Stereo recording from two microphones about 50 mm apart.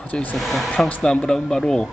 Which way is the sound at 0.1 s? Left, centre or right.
Left.